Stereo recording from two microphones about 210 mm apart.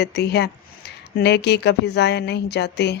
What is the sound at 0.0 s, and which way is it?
Speech, 50° left (ahead or behind).